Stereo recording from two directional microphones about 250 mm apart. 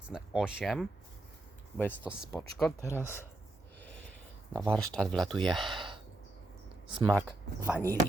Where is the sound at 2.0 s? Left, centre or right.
Centre.